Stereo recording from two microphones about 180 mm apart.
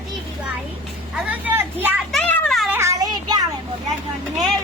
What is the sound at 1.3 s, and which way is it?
Vehicle, 10° right (ahead or behind).